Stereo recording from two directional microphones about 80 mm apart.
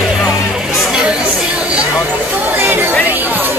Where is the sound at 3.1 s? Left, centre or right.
Right.